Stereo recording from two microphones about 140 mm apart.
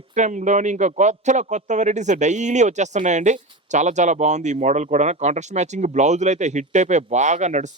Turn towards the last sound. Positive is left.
turn(degrees=-55)  # may be behind; listen again after turning